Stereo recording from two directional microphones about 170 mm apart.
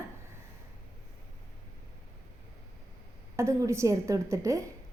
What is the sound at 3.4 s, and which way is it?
A woman's voice, 15° right (ahead or behind).